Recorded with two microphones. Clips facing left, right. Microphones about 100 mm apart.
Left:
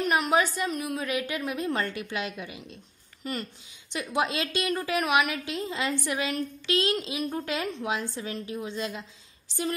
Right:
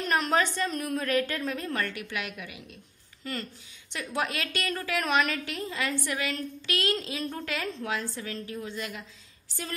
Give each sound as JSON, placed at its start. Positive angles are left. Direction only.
{"t": 0.0, "sound": "a woman's voice", "side_deg": 10}
{"t": 1.7, "sound": "a woman's voice", "side_deg": 25}